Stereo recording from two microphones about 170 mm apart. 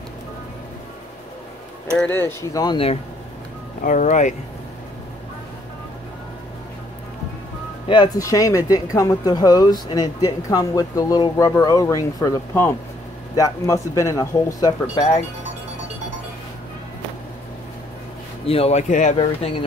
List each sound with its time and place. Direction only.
2.0 s speech: 15° left (ahead or behind); by 3.0 s 30° left (ahead or behind)
3.8 s speech: 45° left (ahead or behind)
7.9 s speech: 25° left (ahead or behind)
18.4 s speech: 35° left (ahead or behind)